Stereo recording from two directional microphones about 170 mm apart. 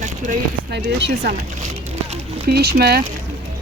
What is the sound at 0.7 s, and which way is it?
Speech, 80° right.